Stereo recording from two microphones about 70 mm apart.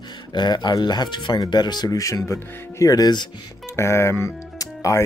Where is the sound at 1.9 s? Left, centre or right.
Left.